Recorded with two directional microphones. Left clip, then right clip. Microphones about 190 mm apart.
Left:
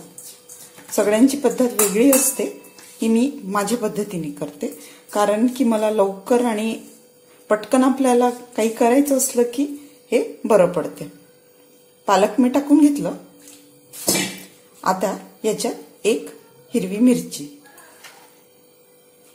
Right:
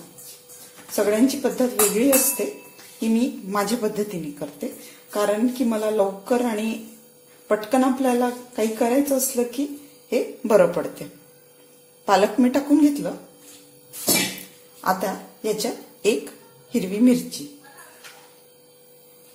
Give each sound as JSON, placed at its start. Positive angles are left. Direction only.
{"t": 0.8, "sound": "a woman's voice", "side_deg": 20}
{"t": 12.1, "sound": "a woman's voice", "side_deg": 10}
{"t": 14.8, "sound": "a woman's voice", "side_deg": 20}